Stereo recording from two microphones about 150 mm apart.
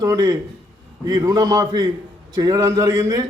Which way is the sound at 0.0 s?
25° right (ahead or behind).